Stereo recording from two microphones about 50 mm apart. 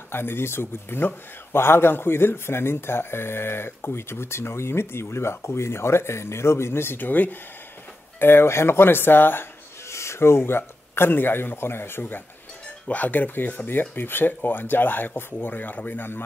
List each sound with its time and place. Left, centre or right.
0.1 s speech: left
8.2 s speech: left
9.8 s speech: left
12.8 s speech: left